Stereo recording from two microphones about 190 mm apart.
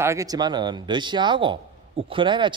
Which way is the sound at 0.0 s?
15° right (ahead or behind).